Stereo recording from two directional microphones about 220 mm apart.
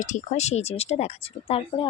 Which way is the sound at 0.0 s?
35° left (ahead or behind).